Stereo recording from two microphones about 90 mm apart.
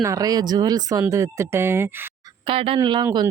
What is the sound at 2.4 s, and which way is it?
Speech, 90° right.